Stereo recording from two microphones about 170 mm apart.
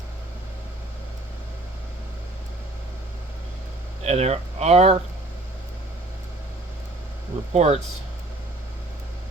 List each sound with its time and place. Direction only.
4.0 s speech: 40° right (ahead or behind)
7.5 s speech: 40° right (ahead or behind)